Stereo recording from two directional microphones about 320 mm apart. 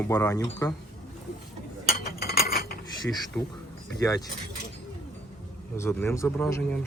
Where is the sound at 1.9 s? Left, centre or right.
Left.